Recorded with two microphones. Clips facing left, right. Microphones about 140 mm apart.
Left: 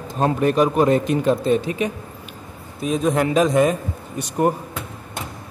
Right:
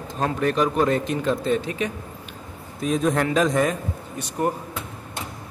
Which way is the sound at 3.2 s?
15° left (ahead or behind).